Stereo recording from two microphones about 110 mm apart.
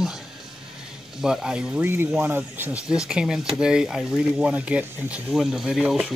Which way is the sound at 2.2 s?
20° right (ahead or behind).